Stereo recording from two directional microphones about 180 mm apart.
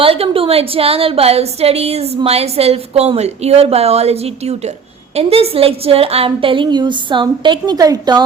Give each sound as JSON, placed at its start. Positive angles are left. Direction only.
{"t": 0.0, "sound": "a woman's voice", "side_deg": -30}